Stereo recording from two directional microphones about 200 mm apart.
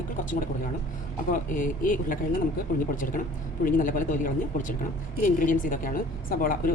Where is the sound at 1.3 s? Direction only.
40° left (ahead or behind).